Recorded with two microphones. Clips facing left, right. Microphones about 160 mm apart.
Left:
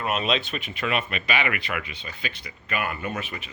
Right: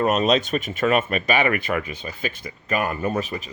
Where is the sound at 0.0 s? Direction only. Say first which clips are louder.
Right 7 dB; 40° right (ahead or behind).